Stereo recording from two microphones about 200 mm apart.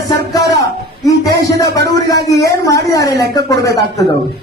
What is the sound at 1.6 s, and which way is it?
A man's voice, 20° left (ahead or behind).